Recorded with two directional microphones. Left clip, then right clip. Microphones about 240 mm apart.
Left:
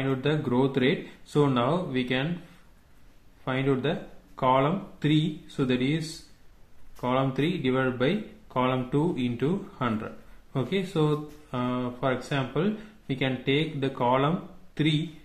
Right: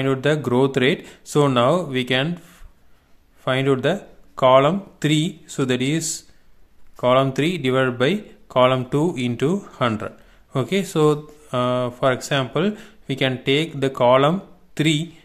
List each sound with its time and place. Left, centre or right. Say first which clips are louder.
0.0 s speech: right 8 dB; right
3.4 s speech: right 8 dB; right